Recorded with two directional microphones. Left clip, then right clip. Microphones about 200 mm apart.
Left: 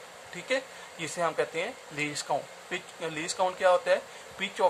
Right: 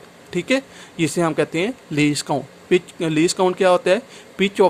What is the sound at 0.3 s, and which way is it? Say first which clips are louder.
Speech: right 10 dB; 45° right (ahead or behind).